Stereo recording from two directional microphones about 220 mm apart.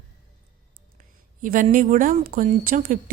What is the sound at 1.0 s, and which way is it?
Speech, 40° right (ahead or behind).